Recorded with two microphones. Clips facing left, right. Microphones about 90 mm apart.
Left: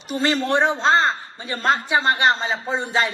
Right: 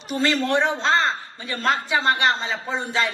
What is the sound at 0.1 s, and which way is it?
A man's voice, 20° left (ahead or behind).